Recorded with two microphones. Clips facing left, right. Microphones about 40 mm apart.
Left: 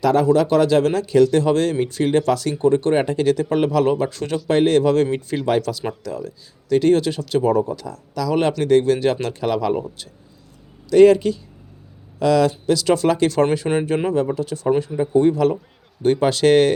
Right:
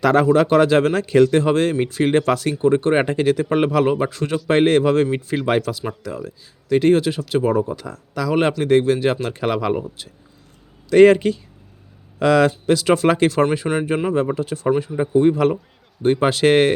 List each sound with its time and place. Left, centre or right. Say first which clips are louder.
0.0 s a man's voice: right 1 dB; right
0.3 s a man's voice: right 1 dB; right
2.6 s speech: even; centre
4.1 s speech: right 1 dB; centre
4.4 s speech: even; right
10.8 s a man's voice: even; right